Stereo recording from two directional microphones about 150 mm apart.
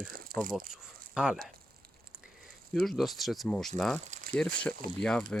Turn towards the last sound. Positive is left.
turn(degrees=5)  # may be behind; listen again after turning